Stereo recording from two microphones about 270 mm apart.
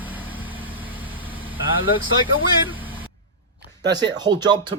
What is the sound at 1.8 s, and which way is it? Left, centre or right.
Speech, centre.